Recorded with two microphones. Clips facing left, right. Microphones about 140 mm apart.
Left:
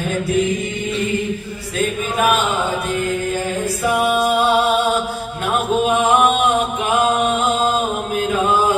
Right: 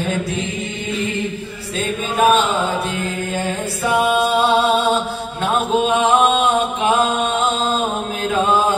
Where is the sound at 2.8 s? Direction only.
30° right (ahead or behind).